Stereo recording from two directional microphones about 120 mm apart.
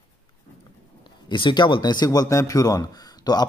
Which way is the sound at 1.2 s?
40° left (ahead or behind).